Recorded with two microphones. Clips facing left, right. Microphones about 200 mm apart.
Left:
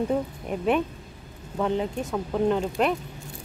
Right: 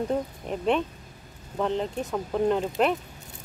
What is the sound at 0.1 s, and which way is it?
Speech, 5° left (ahead or behind).